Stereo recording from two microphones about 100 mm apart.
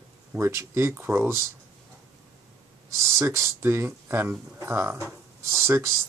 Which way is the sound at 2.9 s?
25° right (ahead or behind).